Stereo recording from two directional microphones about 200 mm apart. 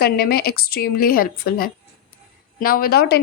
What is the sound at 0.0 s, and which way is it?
Speech, 50° left (ahead or behind).